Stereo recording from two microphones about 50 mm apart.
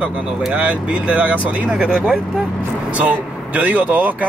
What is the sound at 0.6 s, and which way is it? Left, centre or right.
Speech, right.